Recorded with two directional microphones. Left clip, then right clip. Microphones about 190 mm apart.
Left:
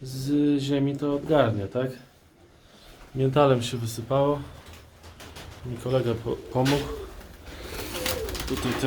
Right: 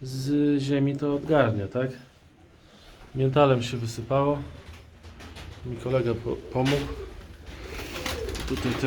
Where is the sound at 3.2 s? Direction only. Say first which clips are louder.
Even; 15° left (ahead or behind).